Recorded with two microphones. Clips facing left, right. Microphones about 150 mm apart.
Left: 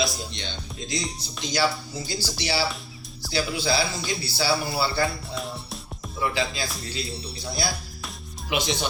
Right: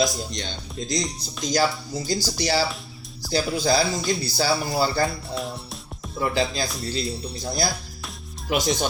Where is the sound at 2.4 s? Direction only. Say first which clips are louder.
Right 2 dB; 40° right (ahead or behind).